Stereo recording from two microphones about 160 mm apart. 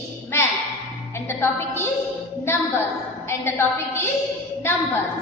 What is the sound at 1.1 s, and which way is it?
Music, 15° left (ahead or behind).